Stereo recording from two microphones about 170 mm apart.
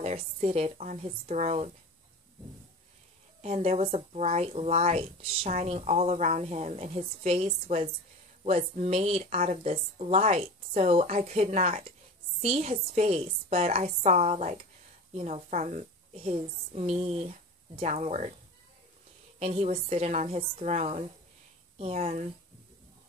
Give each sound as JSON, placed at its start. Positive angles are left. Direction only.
{"t": 0.0, "sound": "speech", "side_deg": -40}
{"t": 3.4, "sound": "speech", "side_deg": -40}
{"t": 19.4, "sound": "speech", "side_deg": -35}